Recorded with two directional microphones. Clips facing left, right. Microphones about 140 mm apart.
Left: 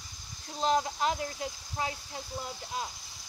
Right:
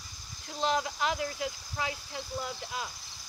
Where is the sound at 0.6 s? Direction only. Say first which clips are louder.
Left 2 dB; 35° left (ahead or behind).